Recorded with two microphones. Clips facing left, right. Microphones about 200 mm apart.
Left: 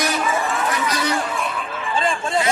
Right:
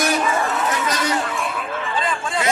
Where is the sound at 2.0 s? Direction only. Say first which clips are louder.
Left 5 dB; 25° left (ahead or behind).